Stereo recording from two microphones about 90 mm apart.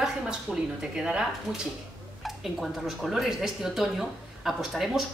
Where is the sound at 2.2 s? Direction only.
Centre (ahead or behind).